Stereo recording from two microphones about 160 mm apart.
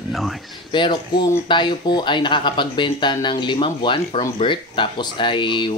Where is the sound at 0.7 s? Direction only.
30° left (ahead or behind).